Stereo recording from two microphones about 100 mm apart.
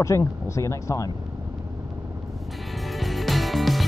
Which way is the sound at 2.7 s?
Centre (ahead or behind).